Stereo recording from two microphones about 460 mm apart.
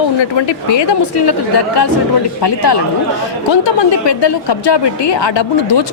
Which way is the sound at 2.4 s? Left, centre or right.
Left.